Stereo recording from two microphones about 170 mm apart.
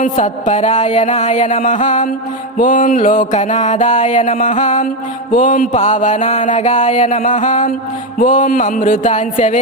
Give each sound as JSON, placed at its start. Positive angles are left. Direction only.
{"t": 0.0, "sound": "mantra", "side_deg": 45}